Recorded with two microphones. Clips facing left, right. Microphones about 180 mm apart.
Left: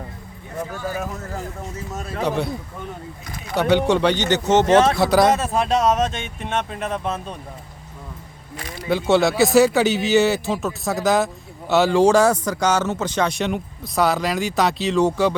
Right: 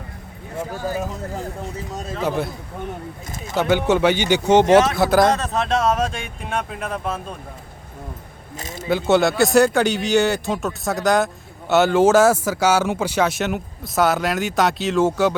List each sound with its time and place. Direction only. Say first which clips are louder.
0.7 s speech: right 4 dB; 40° right (ahead or behind)
2.2 s speech: even; centre (ahead or behind)
3.5 s speech: left 1 dB; centre (ahead or behind)
4.9 s speech: even; centre (ahead or behind)
8.9 s speech: even; centre (ahead or behind)